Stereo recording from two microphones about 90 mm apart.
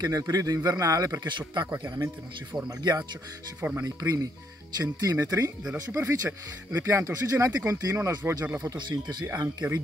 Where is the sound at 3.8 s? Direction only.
40° right (ahead or behind).